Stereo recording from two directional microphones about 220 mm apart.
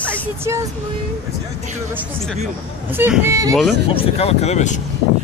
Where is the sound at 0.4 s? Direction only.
15° right (ahead or behind).